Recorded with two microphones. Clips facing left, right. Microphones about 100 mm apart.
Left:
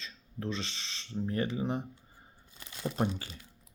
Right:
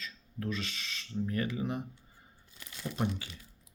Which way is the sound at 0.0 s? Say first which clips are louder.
Even; 25° left (ahead or behind).